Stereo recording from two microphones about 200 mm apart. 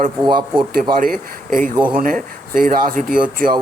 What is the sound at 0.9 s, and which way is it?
Speech, 45° right (ahead or behind).